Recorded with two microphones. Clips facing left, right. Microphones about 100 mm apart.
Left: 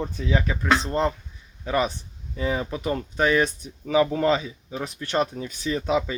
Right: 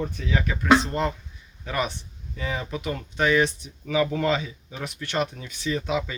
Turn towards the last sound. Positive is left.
turn(degrees=35)  # may be behind; listen again after turning